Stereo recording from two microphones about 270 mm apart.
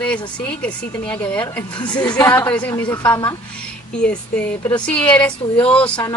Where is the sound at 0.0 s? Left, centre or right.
Centre.